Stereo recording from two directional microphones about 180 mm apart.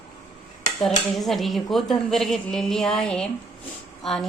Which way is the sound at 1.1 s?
Centre (ahead or behind).